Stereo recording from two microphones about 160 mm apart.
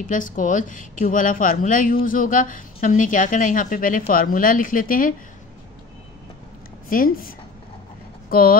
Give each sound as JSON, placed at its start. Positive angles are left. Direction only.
{"t": 0.0, "sound": "speech", "side_deg": 55}
{"t": 6.9, "sound": "speech", "side_deg": 60}